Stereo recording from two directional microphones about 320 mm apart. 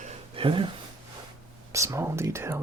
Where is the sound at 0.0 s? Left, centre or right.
Centre.